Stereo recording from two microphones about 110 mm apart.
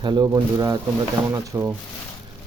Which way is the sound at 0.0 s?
45° right (ahead or behind).